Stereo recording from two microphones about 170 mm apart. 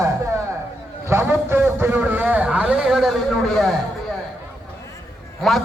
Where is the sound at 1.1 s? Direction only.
15° right (ahead or behind).